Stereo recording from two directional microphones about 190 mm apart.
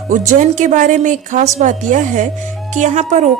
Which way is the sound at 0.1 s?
40° right (ahead or behind).